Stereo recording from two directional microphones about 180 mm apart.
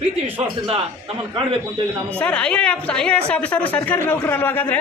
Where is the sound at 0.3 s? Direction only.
30° right (ahead or behind).